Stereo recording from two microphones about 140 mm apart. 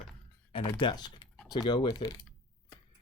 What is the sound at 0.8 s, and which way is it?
Speech, 35° left (ahead or behind).